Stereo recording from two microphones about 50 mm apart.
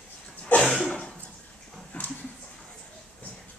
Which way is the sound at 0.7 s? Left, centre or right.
Centre.